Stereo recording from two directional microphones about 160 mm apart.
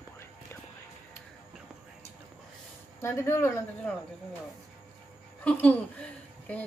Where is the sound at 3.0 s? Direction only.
15° left (ahead or behind).